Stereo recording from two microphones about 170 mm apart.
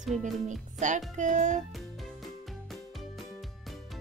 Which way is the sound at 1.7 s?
Centre (ahead or behind).